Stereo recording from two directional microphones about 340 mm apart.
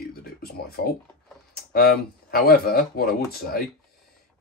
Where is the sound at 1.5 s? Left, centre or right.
Left.